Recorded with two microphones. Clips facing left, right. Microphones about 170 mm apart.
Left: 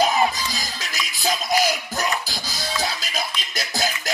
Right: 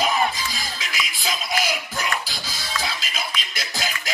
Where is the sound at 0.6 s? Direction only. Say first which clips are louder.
Even; 40° left (ahead or behind).